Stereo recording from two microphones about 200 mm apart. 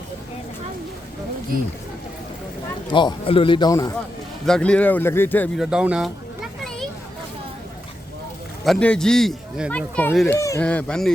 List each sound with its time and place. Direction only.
2.9 s a man's voice: 25° left (ahead or behind)
4.4 s speech: 5° left (ahead or behind)
5.5 s children playing: 5° right (ahead or behind)
8.6 s speech: 5° left (ahead or behind)